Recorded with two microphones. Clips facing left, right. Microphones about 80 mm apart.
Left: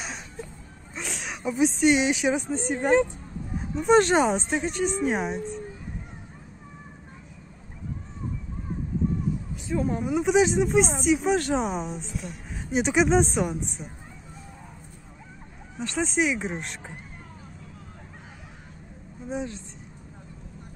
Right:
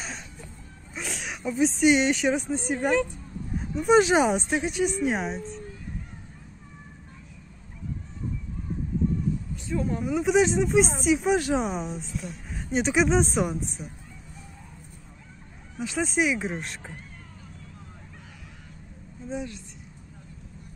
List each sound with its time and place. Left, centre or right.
0.9 s speech: centre
2.9 s speech: left
3.5 s speech: centre
9.7 s speech: centre
15.8 s speech: centre
19.2 s speech: left